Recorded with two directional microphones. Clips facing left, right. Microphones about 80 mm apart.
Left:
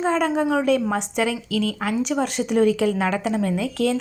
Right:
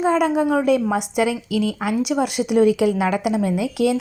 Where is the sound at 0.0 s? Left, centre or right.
Centre.